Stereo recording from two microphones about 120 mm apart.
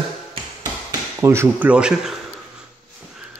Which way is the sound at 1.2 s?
20° right (ahead or behind).